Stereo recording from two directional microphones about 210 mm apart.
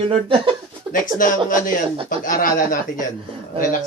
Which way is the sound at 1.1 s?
40° left (ahead or behind).